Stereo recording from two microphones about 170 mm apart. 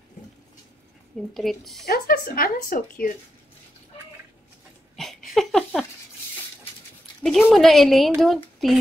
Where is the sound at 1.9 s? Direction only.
60° left (ahead or behind).